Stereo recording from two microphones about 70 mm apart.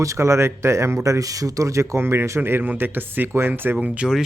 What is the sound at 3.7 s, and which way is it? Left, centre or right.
Speech, centre.